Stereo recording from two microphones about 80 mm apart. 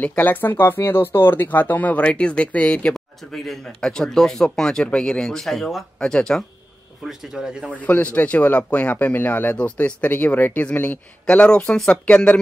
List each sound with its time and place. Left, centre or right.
0.0 s speech: left
2.9 s speech: centre
7.1 s speech: centre
7.8 s speech: centre